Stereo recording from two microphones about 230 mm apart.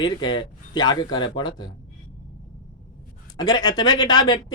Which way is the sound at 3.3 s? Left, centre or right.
Centre.